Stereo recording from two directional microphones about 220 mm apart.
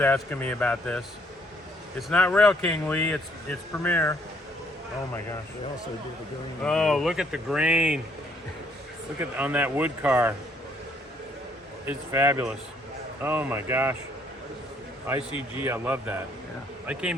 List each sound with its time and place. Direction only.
0.0 s speech: 10° left (ahead or behind)
6.6 s speech: centre (ahead or behind)
9.4 s speech: 5° right (ahead or behind)
11.9 s speech: 10° right (ahead or behind)
15.3 s a man's voice: 25° left (ahead or behind)
15.6 s speech: 10° right (ahead or behind)